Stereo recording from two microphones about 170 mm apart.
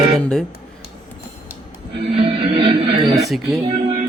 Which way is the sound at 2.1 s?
35° right (ahead or behind).